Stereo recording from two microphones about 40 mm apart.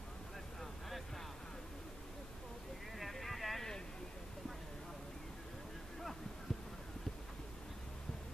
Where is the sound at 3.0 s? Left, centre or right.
Centre.